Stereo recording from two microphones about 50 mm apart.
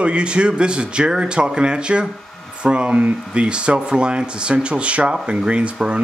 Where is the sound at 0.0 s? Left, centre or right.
Right.